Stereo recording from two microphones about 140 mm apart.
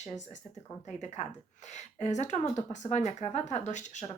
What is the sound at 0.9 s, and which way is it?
Speech, 55° left (ahead or behind).